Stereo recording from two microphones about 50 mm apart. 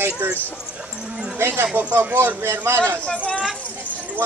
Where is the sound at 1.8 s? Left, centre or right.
Right.